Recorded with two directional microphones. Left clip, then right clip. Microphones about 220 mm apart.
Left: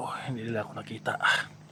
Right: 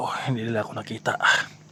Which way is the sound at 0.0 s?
25° right (ahead or behind).